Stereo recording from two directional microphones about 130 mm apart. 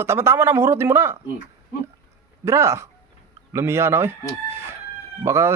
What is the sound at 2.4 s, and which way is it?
A man's voice, 20° right (ahead or behind).